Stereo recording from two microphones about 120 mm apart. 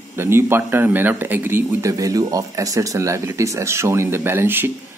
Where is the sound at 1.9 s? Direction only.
30° right (ahead or behind).